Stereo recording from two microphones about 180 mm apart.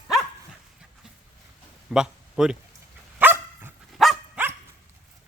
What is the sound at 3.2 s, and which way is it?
Dog, 10° right (ahead or behind).